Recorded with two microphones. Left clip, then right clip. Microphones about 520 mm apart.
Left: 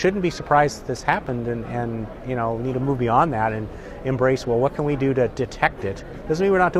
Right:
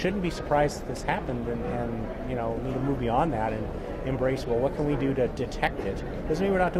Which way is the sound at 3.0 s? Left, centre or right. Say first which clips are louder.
Left 8 dB; left.